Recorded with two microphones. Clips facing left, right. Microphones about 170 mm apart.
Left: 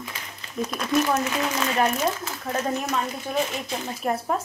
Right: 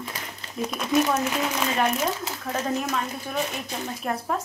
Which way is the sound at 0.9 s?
20° right (ahead or behind).